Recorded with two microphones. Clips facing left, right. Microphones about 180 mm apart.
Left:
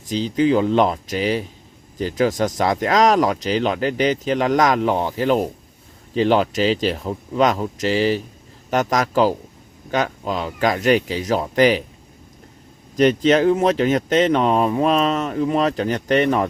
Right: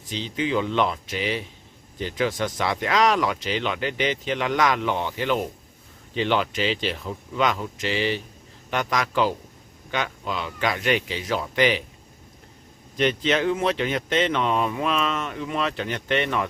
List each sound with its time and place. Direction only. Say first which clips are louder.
0.1 s speech: left 8 dB; 40° left (ahead or behind)
13.0 s speech: left 7 dB; 40° left (ahead or behind)